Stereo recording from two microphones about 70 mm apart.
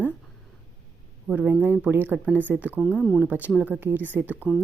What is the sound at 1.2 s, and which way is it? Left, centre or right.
Speech, centre.